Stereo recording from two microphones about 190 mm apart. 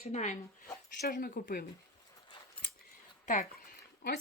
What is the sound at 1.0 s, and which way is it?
Speech, 50° left (ahead or behind).